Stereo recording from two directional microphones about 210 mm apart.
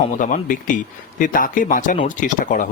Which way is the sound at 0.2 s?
35° left (ahead or behind).